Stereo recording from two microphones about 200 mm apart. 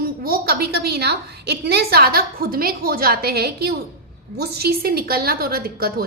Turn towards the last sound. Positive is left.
turn(degrees=-50)  # may be behind; listen again after turning